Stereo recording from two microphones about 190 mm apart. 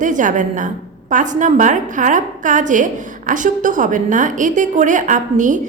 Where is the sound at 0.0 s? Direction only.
40° right (ahead or behind).